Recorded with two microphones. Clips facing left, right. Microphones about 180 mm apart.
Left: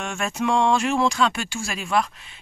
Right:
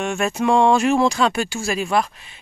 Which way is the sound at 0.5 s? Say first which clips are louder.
Right 5 dB; 40° right (ahead or behind).